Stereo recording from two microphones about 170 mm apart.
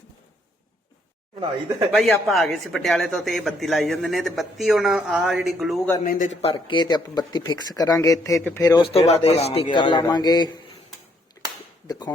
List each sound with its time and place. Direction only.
1.9 s speech: centre (ahead or behind)
6.1 s speech: 50° left (ahead or behind)
6.4 s speech: 30° left (ahead or behind); by 8.6 s 10° left (ahead or behind)
8.6 s speech: 25° left (ahead or behind)
8.9 s speech: 35° left (ahead or behind)
11.4 s a sound: 15° left (ahead or behind)
11.9 s speech: 25° left (ahead or behind)